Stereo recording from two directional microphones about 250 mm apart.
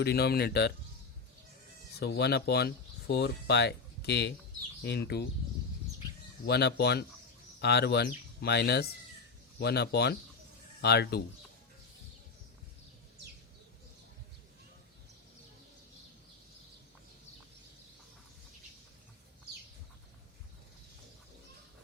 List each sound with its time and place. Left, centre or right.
0.0 s speech: left
2.0 s speech: left
6.4 s speech: left